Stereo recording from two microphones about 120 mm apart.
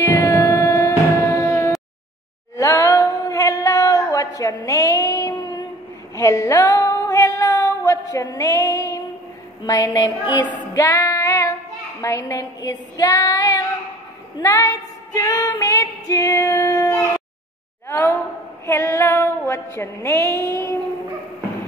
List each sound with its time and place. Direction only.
0.0 s music: 25° left (ahead or behind)
2.5 s a sound: 25° left (ahead or behind)
6.1 s female singing: 25° left (ahead or behind)
9.7 s a sound: 30° left (ahead or behind)
10.7 s music: 25° left (ahead or behind)
12.0 s child singing: 25° left (ahead or behind)
14.4 s female singing: 25° left (ahead or behind)
17.8 s a sound: 25° left (ahead or behind)
18.7 s female singing: 20° left (ahead or behind)